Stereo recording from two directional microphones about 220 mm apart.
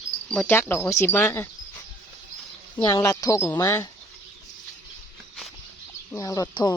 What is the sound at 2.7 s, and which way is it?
Speech, 15° left (ahead or behind).